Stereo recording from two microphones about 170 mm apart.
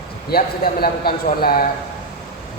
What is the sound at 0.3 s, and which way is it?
Speech, 65° left (ahead or behind).